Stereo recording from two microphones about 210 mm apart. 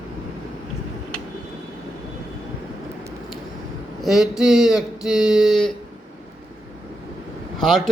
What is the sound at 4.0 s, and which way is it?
A man's voice, centre (ahead or behind).